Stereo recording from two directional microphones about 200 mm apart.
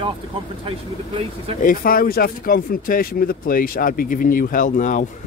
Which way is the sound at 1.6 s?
45° left (ahead or behind).